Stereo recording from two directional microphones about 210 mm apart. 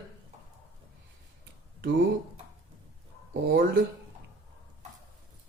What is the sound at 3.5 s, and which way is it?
Speech, 45° right (ahead or behind).